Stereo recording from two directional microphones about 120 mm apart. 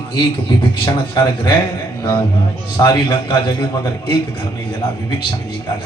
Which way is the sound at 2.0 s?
25° left (ahead or behind).